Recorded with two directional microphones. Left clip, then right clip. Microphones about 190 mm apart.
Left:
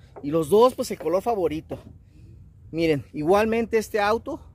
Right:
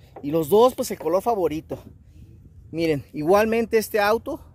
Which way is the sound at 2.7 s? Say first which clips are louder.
Even; centre (ahead or behind).